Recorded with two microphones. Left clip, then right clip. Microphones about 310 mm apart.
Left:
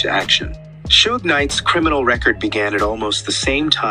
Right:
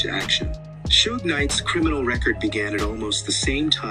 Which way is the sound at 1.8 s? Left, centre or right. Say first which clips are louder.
Left 8 dB; centre.